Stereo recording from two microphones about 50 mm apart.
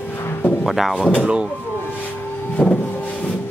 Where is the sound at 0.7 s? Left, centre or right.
Centre.